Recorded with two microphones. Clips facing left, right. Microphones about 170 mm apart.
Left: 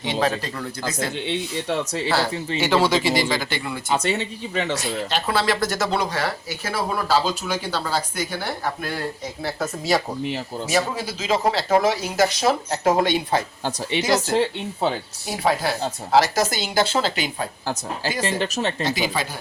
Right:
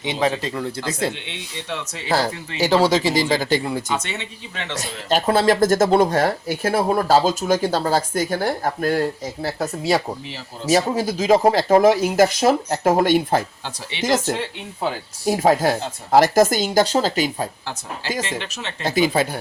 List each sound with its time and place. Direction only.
0.0 s speech: 20° right (ahead or behind)
1.1 s speech: 35° left (ahead or behind)
2.6 s speech: 40° right (ahead or behind)
3.9 s speech: 35° left (ahead or behind)
4.8 s speech: 45° right (ahead or behind)
9.4 s speech: 30° right (ahead or behind); by 13.4 s 50° right (ahead or behind)
14.3 s speech: 25° left (ahead or behind)
15.3 s speech: 45° right (ahead or behind)
18.2 s speech: 40° left (ahead or behind)
18.8 s speech: 50° right (ahead or behind)